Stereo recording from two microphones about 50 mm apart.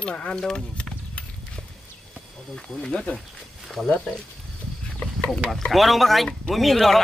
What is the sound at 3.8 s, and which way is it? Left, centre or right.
Speech, left.